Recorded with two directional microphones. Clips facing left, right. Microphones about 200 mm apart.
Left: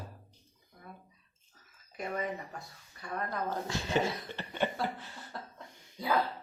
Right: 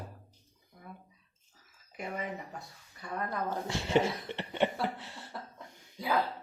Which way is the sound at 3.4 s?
25° right (ahead or behind).